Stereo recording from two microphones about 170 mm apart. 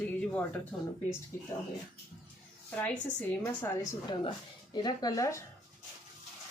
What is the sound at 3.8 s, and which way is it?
Speech, 25° left (ahead or behind).